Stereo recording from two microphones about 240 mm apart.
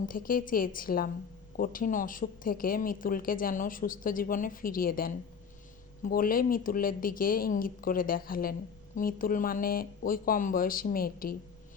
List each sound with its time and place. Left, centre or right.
0.0 s a woman's voice: left